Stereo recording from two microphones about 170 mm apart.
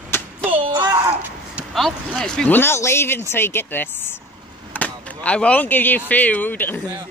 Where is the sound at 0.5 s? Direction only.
30° right (ahead or behind).